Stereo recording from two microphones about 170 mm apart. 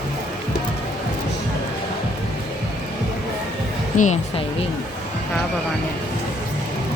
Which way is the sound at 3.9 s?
45° left (ahead or behind).